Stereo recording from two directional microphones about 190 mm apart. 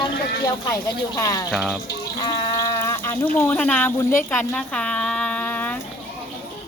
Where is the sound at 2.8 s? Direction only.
15° left (ahead or behind).